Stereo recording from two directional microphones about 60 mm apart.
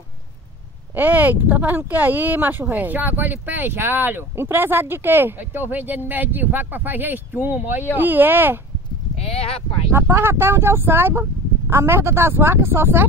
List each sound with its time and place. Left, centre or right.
0.9 s speech: right
9.9 s speech: right